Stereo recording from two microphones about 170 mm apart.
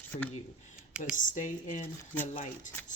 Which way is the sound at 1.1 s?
50° left (ahead or behind).